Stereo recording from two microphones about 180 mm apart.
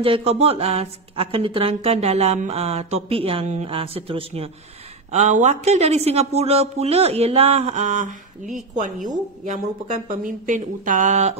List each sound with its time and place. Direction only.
0.0 s speech: 30° right (ahead or behind)